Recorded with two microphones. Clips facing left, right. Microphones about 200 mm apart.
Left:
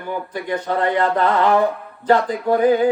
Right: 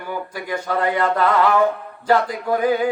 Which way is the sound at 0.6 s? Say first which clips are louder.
Left 1 dB; 35° left (ahead or behind).